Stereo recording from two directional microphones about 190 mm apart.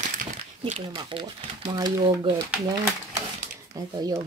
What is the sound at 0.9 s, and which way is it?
Speech, 25° right (ahead or behind).